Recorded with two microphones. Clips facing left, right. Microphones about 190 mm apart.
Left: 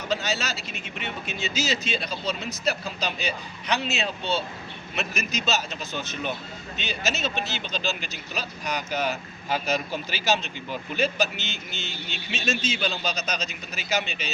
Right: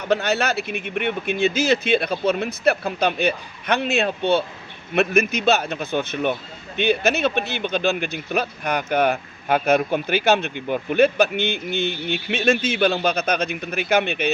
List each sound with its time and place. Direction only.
0.1 s speech: 60° right (ahead or behind)